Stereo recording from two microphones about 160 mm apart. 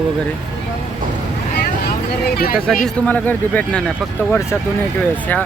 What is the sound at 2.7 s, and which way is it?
Speech, centre (ahead or behind).